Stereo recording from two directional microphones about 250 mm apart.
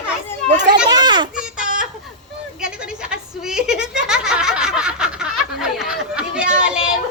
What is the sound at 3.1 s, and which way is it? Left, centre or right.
Snicker, centre.